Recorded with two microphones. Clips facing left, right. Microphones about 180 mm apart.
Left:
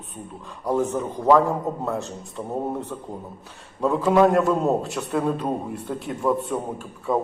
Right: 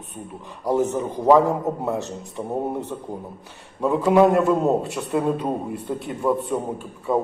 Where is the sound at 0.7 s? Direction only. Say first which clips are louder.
Right 2 dB; 10° right (ahead or behind).